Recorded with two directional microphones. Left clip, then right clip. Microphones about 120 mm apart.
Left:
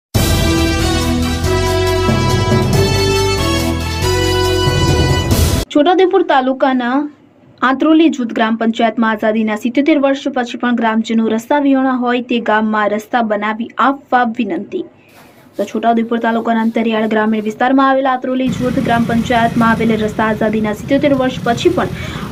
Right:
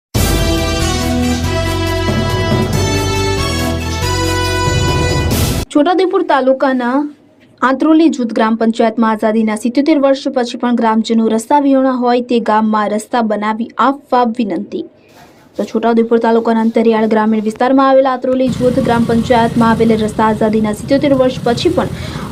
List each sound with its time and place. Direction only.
5.7 s speech: 40° right (ahead or behind)